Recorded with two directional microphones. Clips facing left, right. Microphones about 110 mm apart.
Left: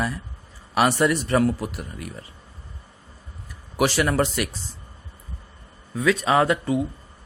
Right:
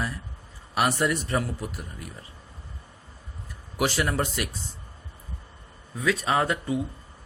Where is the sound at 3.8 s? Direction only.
80° left.